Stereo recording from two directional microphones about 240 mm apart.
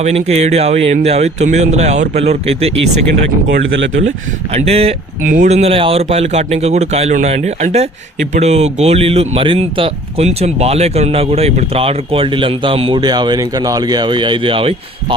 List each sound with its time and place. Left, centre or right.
0.0 s speech: right
4.5 s speech: right